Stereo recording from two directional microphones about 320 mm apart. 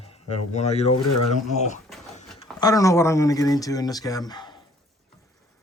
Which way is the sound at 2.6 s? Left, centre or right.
Centre.